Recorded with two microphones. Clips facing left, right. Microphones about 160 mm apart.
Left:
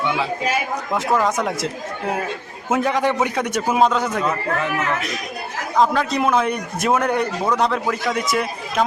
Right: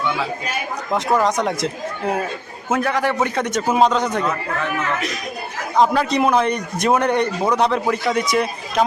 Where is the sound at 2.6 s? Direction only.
20° left (ahead or behind).